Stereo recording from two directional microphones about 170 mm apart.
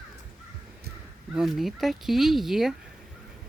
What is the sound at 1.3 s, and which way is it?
Speech, centre (ahead or behind).